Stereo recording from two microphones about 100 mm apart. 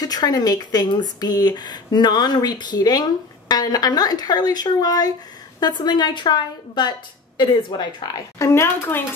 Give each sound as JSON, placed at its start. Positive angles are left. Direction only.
{"t": 0.0, "sound": "speech", "side_deg": 40}
{"t": 8.4, "sound": "speech", "side_deg": 25}